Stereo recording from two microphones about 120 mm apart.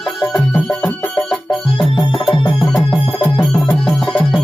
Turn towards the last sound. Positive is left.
turn(degrees=0)  # may be behind; listen again after turning